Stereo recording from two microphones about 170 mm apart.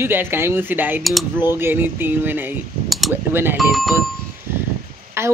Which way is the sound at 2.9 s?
Centre (ahead or behind).